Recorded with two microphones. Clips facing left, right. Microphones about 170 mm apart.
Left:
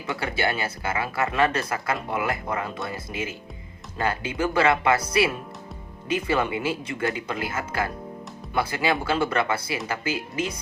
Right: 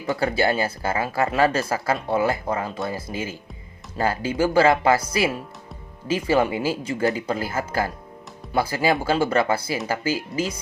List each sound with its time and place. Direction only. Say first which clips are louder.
0.1 s speech: right 5 dB; 35° right (ahead or behind)
6.1 s speech: right 4 dB; 30° right (ahead or behind)